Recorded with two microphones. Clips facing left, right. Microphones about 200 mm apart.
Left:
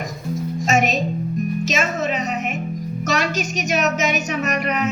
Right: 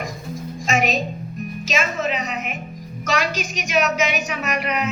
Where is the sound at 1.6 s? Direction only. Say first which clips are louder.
Right 3 dB; 40° left (ahead or behind).